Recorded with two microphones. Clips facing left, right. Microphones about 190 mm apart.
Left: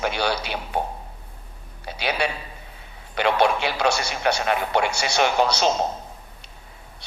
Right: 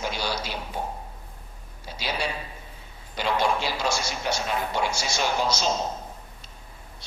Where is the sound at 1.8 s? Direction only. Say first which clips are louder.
Left 5 dB; 65° left (ahead or behind).